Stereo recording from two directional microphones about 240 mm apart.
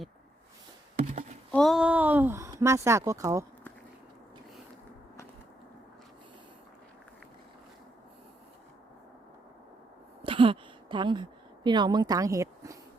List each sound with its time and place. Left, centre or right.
1.5 s speech: centre
10.2 s a woman's voice: right